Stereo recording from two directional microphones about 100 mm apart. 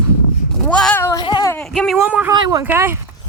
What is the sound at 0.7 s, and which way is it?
Speech, 10° left (ahead or behind).